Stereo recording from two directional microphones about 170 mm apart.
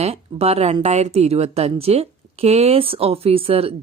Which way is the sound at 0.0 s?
35° right (ahead or behind).